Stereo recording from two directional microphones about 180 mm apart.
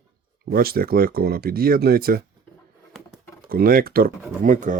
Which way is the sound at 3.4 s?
55° right (ahead or behind).